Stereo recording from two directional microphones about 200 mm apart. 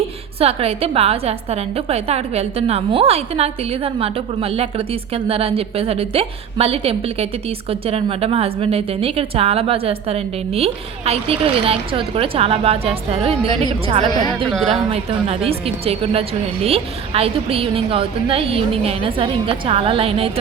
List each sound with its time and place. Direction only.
0.3 s a woman's voice: 30° right (ahead or behind)
14.7 s a woman's voice: 30° right (ahead or behind)